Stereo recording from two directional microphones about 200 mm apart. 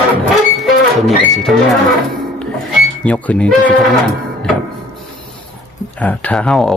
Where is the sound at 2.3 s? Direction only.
5° left (ahead or behind).